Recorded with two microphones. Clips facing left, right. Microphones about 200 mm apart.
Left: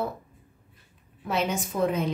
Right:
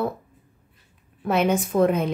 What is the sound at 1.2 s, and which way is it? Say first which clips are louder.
Speech: right 7 dB; 60° right (ahead or behind).